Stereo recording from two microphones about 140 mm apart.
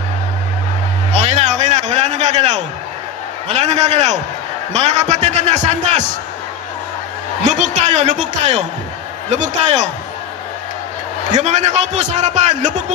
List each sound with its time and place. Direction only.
1.1 s a sound: 55° right (ahead or behind)
3.4 s a man's voice: 50° right (ahead or behind)
7.4 s a man's voice: 60° right (ahead or behind)
11.2 s a man's voice: 60° right (ahead or behind)